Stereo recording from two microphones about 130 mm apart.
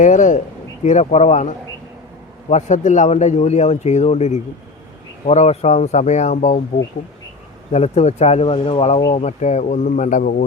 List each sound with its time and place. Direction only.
0.0 s speech: 70° left (ahead or behind)
7.7 s speech: 55° left (ahead or behind); by 10.4 s 90° left